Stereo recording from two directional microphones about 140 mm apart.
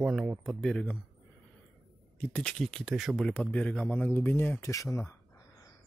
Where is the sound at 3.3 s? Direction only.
10° left (ahead or behind).